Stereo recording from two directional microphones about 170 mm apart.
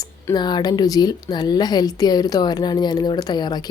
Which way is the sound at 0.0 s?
25° left (ahead or behind).